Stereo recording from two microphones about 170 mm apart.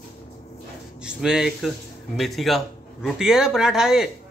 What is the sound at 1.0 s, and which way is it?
Speech, 5° right (ahead or behind).